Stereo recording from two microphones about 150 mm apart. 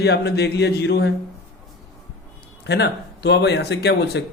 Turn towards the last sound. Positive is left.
turn(degrees=90)